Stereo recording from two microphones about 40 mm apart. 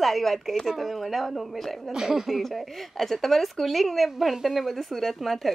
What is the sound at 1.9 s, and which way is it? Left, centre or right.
Speech, centre.